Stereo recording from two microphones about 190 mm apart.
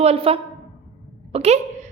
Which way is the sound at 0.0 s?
30° right (ahead or behind).